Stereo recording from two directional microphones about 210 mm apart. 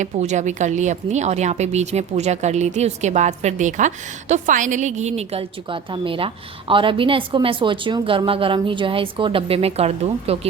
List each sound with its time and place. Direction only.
0.0 s speech: 35° right (ahead or behind)